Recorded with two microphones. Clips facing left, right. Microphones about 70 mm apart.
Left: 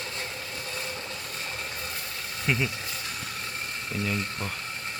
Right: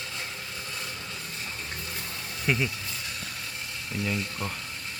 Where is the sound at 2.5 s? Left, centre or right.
Centre.